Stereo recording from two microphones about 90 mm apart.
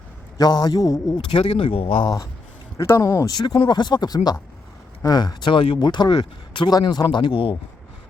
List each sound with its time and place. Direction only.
0.3 s speech: 45° left (ahead or behind)
1.3 s speech: 75° left (ahead or behind)
2.7 s speech: 35° left (ahead or behind)
3.2 s speech: 50° left (ahead or behind); by 7.5 s 70° left (ahead or behind)